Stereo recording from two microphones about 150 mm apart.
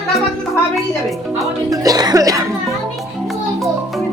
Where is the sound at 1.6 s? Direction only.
25° right (ahead or behind).